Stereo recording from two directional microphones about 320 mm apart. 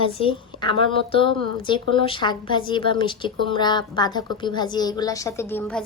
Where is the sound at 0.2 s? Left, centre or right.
Centre.